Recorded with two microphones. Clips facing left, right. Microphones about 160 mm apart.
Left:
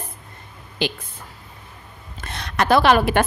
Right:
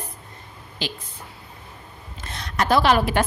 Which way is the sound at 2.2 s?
70° left (ahead or behind).